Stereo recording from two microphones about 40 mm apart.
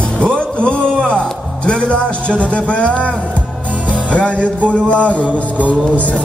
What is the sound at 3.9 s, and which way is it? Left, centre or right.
Music, left.